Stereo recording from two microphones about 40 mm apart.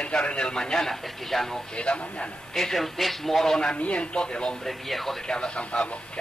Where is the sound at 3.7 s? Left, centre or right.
Left.